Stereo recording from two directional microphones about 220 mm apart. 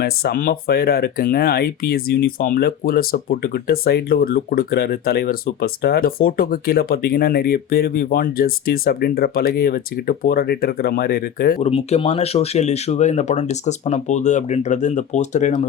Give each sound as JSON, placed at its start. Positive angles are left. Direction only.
{"t": 0.0, "sound": "speech", "side_deg": 45}